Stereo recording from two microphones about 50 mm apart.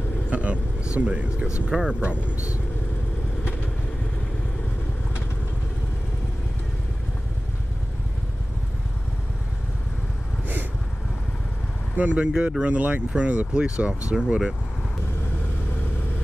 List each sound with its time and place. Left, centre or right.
0.3 s vehicle: right
0.9 s speech: right
12.0 s speech: right